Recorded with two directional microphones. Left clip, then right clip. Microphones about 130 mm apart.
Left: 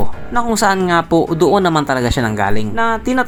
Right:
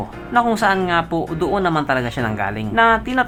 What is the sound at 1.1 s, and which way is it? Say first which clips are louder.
Speech: left 8 dB; 25° left (ahead or behind).